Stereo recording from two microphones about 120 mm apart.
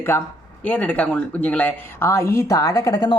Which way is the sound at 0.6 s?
10° left (ahead or behind).